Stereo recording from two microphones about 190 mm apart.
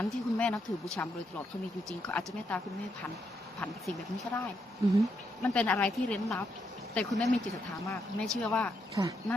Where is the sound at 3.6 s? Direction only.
5° left (ahead or behind).